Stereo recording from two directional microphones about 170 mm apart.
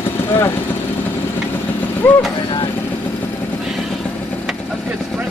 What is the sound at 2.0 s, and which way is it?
Speech, 10° left (ahead or behind).